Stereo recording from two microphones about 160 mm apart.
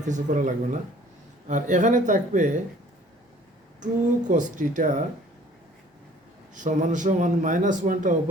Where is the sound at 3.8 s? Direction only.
50° right (ahead or behind).